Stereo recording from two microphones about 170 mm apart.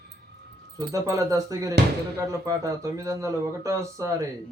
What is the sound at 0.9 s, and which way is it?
Speech, 20° right (ahead or behind).